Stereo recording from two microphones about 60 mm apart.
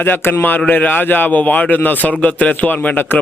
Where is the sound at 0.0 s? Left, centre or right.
Left.